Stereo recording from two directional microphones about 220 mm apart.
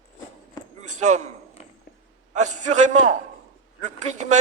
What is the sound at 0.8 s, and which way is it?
Speech, 35° right (ahead or behind).